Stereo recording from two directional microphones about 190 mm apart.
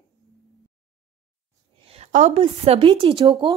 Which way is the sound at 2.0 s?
35° right (ahead or behind).